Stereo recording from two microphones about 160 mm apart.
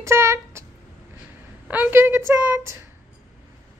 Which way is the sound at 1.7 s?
10° right (ahead or behind).